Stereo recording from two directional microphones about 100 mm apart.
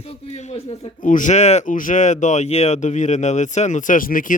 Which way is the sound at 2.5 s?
90° left.